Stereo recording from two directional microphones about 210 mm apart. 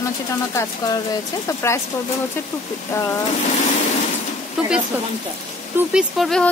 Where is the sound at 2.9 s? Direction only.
15° left (ahead or behind).